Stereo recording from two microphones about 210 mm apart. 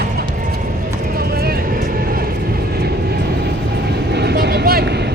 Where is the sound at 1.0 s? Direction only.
45° right (ahead or behind).